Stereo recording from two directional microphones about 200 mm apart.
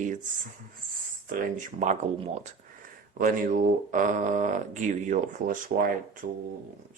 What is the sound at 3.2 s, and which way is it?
Speech, 40° right (ahead or behind).